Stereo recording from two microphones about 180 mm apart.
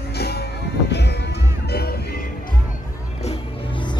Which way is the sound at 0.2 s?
65° left (ahead or behind).